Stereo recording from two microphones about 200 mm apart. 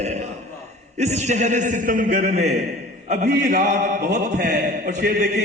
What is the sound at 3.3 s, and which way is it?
Speech, 50° right (ahead or behind).